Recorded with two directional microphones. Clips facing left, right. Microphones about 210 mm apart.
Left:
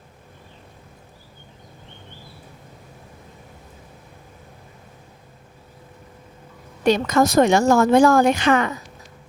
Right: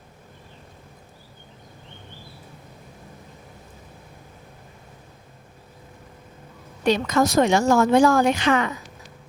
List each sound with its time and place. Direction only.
6.8 s a woman's voice: 45° left (ahead or behind)